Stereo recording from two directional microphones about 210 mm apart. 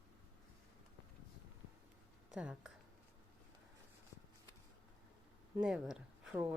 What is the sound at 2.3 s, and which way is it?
Speech, 5° right (ahead or behind).